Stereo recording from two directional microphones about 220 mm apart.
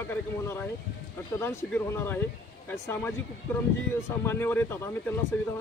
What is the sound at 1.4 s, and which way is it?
Speech, 10° left (ahead or behind).